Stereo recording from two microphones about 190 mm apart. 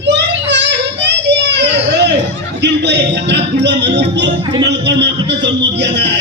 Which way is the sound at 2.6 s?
65° right (ahead or behind).